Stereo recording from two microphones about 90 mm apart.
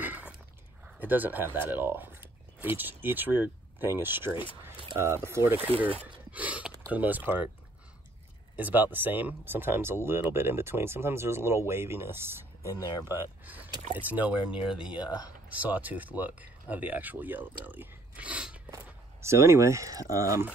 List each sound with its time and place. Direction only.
0.0 s a sound: 20° right (ahead or behind)
0.8 s speech: 20° right (ahead or behind)
6.3 s a sound: 15° right (ahead or behind)
6.9 s speech: 20° right (ahead or behind)
8.5 s speech: 20° right (ahead or behind)
19.2 s speech: 30° right (ahead or behind)